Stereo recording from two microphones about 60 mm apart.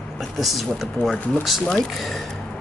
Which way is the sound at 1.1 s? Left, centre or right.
Centre.